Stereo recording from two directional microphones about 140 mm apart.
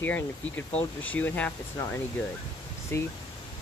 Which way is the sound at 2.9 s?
20° left (ahead or behind).